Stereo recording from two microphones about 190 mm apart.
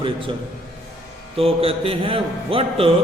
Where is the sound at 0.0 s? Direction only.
25° right (ahead or behind).